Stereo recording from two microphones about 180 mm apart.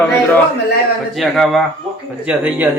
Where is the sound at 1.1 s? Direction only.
Centre (ahead or behind).